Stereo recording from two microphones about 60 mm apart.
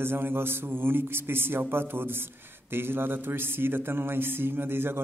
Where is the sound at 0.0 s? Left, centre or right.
Right.